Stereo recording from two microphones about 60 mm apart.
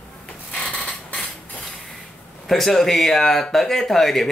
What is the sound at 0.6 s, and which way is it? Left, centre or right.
Mechanisms, left.